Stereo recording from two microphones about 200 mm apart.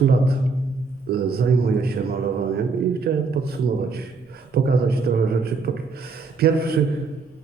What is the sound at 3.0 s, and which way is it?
A man's voice, 50° right (ahead or behind).